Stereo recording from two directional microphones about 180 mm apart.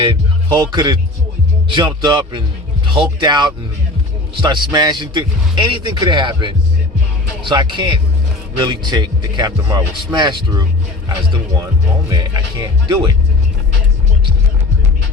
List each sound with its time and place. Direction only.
0.0 s a man's voice: 25° right (ahead or behind)
12.0 s a man's voice: 20° right (ahead or behind)